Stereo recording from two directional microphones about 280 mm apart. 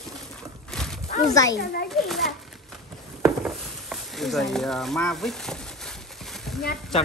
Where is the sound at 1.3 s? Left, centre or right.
Centre.